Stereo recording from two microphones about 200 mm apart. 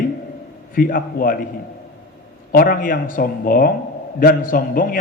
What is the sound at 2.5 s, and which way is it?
A man's voice, 45° left (ahead or behind).